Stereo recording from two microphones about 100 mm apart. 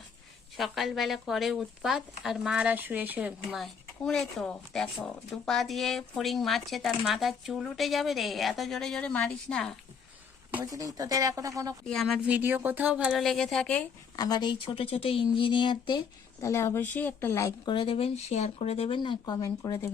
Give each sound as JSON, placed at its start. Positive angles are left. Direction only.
{"t": 0.5, "sound": "speech", "side_deg": 0}
{"t": 3.6, "sound": "speech", "side_deg": 5}
{"t": 10.7, "sound": "speech", "side_deg": -35}
{"t": 11.9, "sound": "speech", "side_deg": 5}
{"t": 12.2, "sound": "speech", "side_deg": -15}
{"t": 13.2, "sound": "speech", "side_deg": 5}
{"t": 14.2, "sound": "speech", "side_deg": 45}
{"t": 16.4, "sound": "speech", "side_deg": 30}
{"t": 17.7, "sound": "speech", "side_deg": 65}
{"t": 18.9, "sound": "speech", "side_deg": 50}